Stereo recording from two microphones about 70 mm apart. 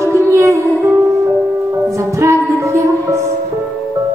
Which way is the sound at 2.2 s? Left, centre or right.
Right.